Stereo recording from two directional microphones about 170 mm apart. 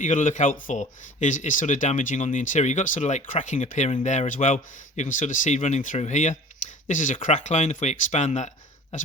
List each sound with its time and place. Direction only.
0.0 s speech: 50° left (ahead or behind)